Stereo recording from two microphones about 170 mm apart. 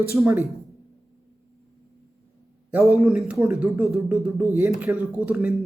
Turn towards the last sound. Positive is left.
turn(degrees=-10)  # may be behind; listen again after turning